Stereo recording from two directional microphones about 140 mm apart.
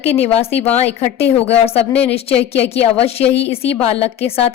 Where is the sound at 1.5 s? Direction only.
45° left (ahead or behind).